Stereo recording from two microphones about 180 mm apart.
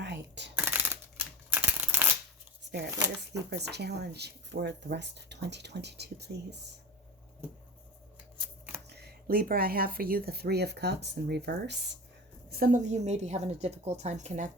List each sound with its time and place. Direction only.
0.0 s a sound: 75° right (ahead or behind)
0.5 s a sound: 10° right (ahead or behind)
2.7 s shuffling cards: 75° right (ahead or behind)
3.6 s speech: 65° right (ahead or behind)
8.9 s speech: 60° right (ahead or behind)
12.5 s a woman's voice: 55° right (ahead or behind)